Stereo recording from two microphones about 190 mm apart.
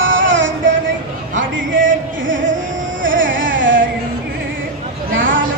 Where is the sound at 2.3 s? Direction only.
80° right.